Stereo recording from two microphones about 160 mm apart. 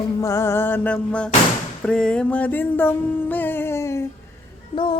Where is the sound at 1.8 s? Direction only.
5° left (ahead or behind).